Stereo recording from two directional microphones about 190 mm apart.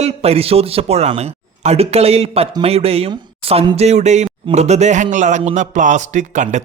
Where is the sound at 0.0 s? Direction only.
30° right (ahead or behind).